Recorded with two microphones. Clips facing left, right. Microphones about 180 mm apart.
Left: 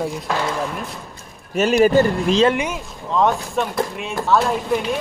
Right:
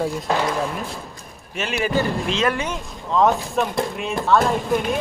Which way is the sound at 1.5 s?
40° left (ahead or behind).